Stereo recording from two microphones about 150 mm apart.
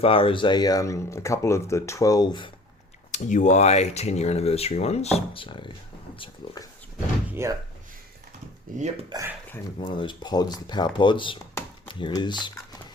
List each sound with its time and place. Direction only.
0.0 s speech: 40° left (ahead or behind)
3.1 s speech: 55° left (ahead or behind); by 6.6 s 35° left (ahead or behind)
7.3 s door: 15° right (ahead or behind)
8.7 s speech: 65° right (ahead or behind)
9.1 s speech: 25° right (ahead or behind)
10.0 s speech: 30° left (ahead or behind)